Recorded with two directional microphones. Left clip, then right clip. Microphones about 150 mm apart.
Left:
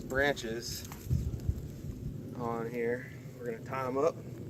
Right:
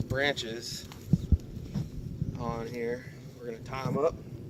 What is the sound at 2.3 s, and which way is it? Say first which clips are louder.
Speech: left 1 dB; 55° right (ahead or behind).